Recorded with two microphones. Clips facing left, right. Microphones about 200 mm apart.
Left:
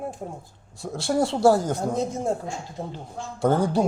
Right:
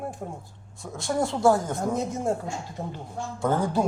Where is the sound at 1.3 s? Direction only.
30° left (ahead or behind).